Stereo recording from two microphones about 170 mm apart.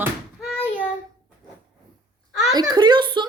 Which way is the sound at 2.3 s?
Centre (ahead or behind).